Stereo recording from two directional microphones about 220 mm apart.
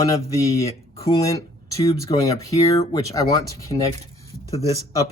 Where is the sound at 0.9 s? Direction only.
25° left (ahead or behind).